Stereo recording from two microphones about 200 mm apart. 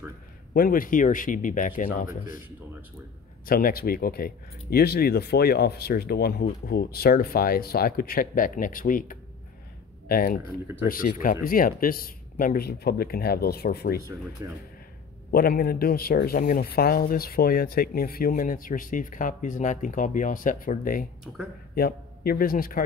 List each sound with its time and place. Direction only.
0.5 s speech: 45° left (ahead or behind)
3.4 s speech: 45° left (ahead or behind)
15.3 s speech: 45° left (ahead or behind)